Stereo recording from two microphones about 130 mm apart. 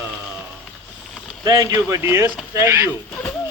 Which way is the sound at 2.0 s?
15° right (ahead or behind).